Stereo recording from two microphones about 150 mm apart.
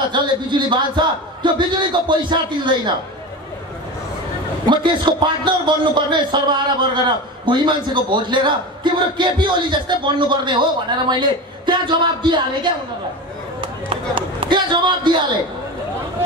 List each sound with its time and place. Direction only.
0.1 s a man's voice: 30° right (ahead or behind)
4.6 s a man's voice: 30° right (ahead or behind)